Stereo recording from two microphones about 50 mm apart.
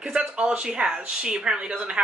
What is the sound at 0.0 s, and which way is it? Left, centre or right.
Speech, right.